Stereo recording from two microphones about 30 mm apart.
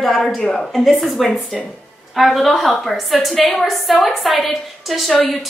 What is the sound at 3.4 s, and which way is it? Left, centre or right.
Speech, centre.